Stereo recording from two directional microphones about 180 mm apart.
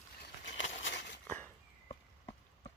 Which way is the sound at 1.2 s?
10° left (ahead or behind).